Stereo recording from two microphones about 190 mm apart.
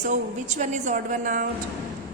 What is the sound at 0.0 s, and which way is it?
A woman's voice, 40° right (ahead or behind).